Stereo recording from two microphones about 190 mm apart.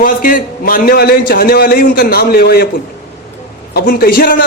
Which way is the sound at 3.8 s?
55° left (ahead or behind).